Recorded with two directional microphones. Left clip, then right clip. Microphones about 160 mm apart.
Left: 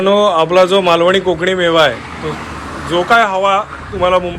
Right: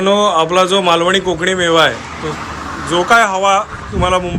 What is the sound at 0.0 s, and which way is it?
A man's voice, 5° right (ahead or behind).